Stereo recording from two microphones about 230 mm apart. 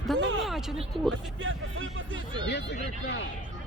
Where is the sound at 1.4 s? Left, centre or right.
Right.